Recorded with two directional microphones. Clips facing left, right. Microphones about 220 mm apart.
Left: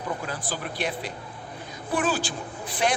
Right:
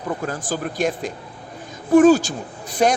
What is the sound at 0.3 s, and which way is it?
A woman's voice, 45° right (ahead or behind).